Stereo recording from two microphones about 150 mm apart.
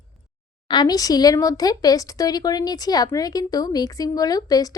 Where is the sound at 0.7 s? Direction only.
25° left (ahead or behind).